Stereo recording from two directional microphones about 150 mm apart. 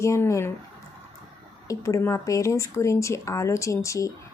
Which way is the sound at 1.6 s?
20° left (ahead or behind).